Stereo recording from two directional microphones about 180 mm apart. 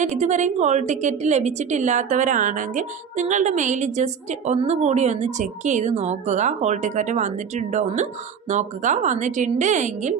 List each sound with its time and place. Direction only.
0.0 s a woman's voice: 40° right (ahead or behind)